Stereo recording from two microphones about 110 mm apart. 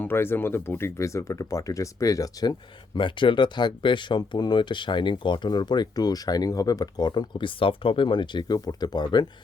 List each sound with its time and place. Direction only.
0.0 s speech: 20° left (ahead or behind)
2.9 s speech: 50° left (ahead or behind)